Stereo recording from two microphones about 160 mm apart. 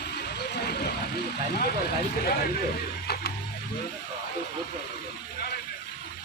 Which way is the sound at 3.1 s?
85° left.